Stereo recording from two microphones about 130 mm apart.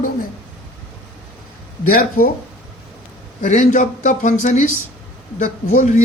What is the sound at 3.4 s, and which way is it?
Speech, 85° left.